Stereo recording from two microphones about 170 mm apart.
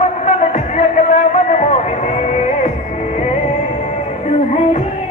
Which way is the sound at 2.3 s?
45° left (ahead or behind).